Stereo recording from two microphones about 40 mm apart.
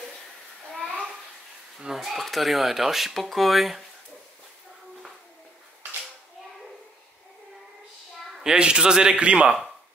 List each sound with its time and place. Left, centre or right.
2.0 s speech: centre
8.5 s a man's voice: right